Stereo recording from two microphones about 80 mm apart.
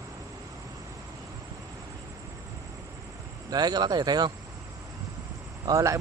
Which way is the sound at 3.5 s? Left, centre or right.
Right.